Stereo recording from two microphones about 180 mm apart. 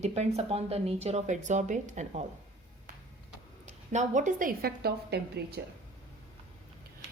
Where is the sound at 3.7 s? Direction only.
40° right (ahead or behind); by 5.6 s 65° right (ahead or behind).